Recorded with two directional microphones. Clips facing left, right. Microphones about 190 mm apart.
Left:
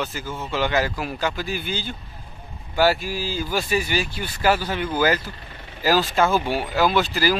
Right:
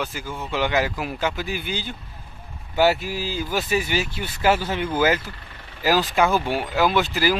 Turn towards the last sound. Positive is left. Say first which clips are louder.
# even
turn(degrees=-15)  # may be behind; listen again after turning